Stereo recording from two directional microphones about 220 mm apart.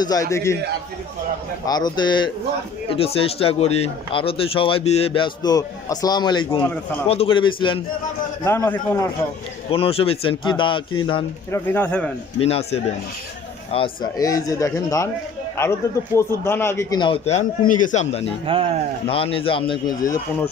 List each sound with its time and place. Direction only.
0.0 s speech: 15° left (ahead or behind)
1.7 s speech: 20° left (ahead or behind)
8.5 s speech: 10° left (ahead or behind)
9.7 s speech: 25° left (ahead or behind)
11.5 s speech: 10° left (ahead or behind)
12.4 s speech: 25° left (ahead or behind)
16.2 s speech: 10° left (ahead or behind); by 18.2 s 30° left (ahead or behind)
18.5 s speech: 25° right (ahead or behind)
19.0 s speech: 25° left (ahead or behind)